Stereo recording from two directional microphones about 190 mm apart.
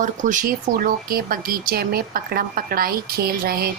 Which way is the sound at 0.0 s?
40° right (ahead or behind).